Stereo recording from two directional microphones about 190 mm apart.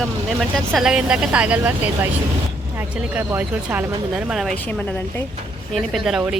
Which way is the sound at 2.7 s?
10° right (ahead or behind).